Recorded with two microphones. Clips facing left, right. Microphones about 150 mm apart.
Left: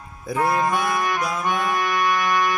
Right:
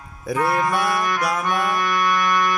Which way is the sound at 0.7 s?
75° right (ahead or behind).